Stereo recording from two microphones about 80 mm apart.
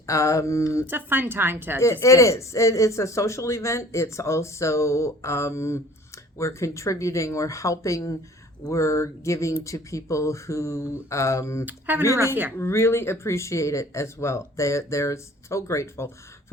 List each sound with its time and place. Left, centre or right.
0.0 s speech: left
0.9 s a woman's voice: right
1.8 s speech: left
11.6 s a woman's voice: right
12.5 s speech: left